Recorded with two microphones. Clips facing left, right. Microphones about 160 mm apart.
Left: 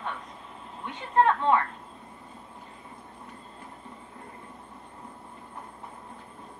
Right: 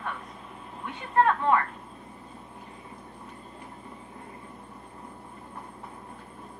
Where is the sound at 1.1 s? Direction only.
20° left (ahead or behind).